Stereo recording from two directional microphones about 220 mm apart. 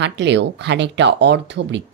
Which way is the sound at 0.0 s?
55° right (ahead or behind).